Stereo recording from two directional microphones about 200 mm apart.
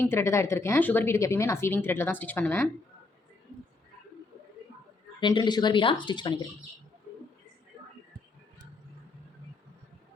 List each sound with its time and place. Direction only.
0.0 s speech: 15° left (ahead or behind)
5.2 s speech: 20° left (ahead or behind)